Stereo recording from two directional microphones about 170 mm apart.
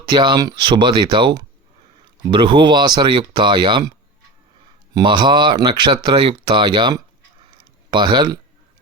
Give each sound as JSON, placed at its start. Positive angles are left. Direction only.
{"t": 0.1, "sound": "speech", "side_deg": -25}
{"t": 4.9, "sound": "speech", "side_deg": -25}